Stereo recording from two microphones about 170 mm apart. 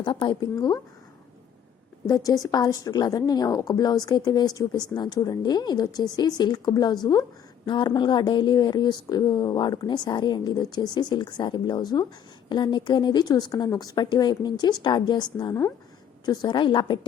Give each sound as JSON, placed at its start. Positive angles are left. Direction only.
{"t": 0.0, "sound": "a woman's voice", "side_deg": 25}
{"t": 2.0, "sound": "a woman's voice", "side_deg": 20}